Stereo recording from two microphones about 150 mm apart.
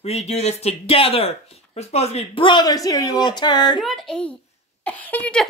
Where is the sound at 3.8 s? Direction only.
Centre (ahead or behind).